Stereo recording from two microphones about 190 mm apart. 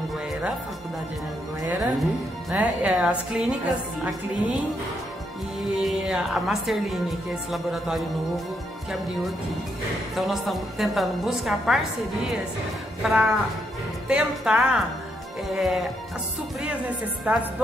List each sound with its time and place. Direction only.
1.7 s a woman's voice: centre (ahead or behind)
5.8 s speech: 5° right (ahead or behind)
10.1 s speech: centre (ahead or behind)
13.0 s speech: centre (ahead or behind)